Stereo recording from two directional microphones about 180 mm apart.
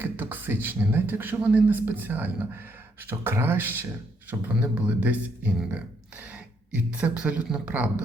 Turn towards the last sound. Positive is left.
turn(degrees=-5)  # may be behind; listen again after turning